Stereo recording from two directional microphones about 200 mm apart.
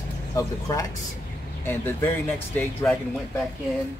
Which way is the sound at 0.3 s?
15° left (ahead or behind).